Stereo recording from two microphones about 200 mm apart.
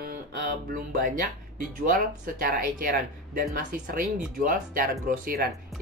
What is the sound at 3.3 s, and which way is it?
Speech, 45° right (ahead or behind).